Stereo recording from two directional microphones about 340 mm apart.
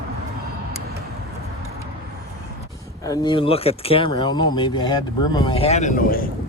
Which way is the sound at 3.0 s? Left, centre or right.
Centre.